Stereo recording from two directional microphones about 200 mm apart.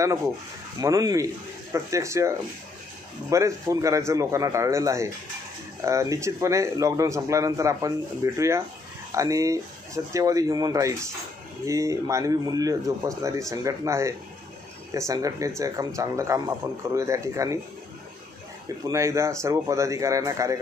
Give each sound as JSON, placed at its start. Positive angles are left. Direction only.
{"t": 0.7, "sound": "a man's voice", "side_deg": -20}
{"t": 18.9, "sound": "a man's voice", "side_deg": -15}